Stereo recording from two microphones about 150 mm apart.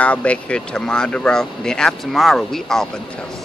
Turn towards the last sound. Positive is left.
turn(degrees=5)  # may be behind; listen again after turning